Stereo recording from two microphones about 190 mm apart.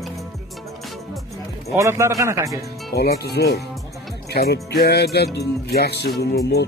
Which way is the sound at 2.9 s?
55° left (ahead or behind).